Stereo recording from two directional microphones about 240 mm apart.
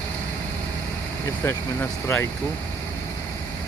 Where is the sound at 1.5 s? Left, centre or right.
Centre.